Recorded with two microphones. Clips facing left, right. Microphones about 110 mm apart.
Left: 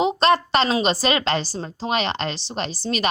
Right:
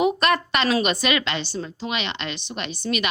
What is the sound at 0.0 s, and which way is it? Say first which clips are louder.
A woman's voice: left 2 dB; 25° left (ahead or behind).